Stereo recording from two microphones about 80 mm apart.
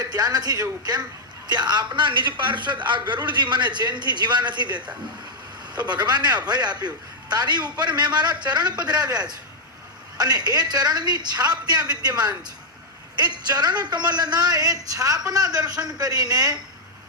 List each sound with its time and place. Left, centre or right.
0.1 s a woman's voice: right
1.5 s a woman's voice: right
1.9 s a man's voice: right
5.9 s a woman's voice: right